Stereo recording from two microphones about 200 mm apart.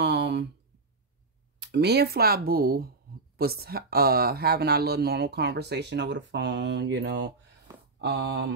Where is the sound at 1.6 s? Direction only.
55° right (ahead or behind).